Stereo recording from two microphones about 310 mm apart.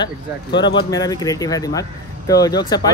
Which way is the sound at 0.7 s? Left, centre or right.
Centre.